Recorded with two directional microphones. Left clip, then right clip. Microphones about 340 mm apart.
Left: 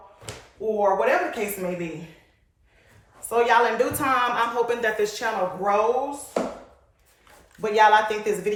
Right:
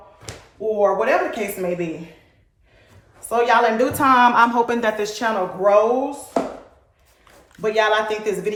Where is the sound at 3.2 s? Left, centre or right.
Centre.